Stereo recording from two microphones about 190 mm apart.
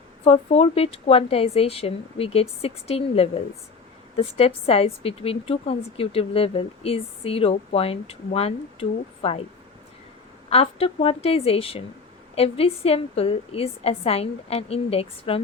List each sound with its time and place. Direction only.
0.3 s a woman's voice: 30° left (ahead or behind)
10.5 s a woman's voice: 30° left (ahead or behind)